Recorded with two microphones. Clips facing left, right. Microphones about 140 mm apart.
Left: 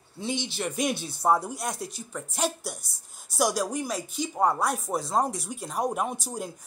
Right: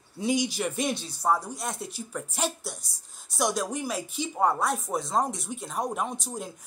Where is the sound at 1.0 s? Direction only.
15° left (ahead or behind).